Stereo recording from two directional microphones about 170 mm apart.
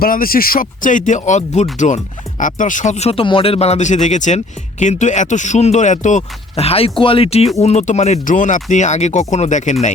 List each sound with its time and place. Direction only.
0.0 s speech: 60° left (ahead or behind)